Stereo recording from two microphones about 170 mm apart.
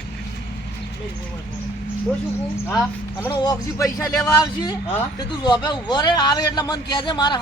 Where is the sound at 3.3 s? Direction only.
25° left (ahead or behind).